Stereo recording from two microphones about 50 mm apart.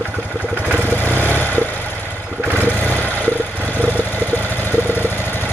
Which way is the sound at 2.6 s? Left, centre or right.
Left.